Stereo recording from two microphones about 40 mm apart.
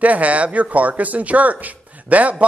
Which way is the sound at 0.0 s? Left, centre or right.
Right.